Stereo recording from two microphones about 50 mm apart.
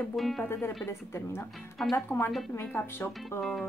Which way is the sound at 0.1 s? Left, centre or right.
Centre.